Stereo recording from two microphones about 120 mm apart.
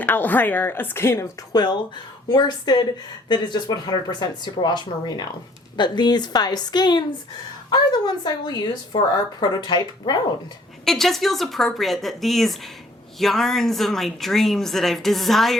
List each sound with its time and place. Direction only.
0.0 s speech: 15° left (ahead or behind)
1.5 s speech: 35° left (ahead or behind)
10.8 s speech: 5° left (ahead or behind)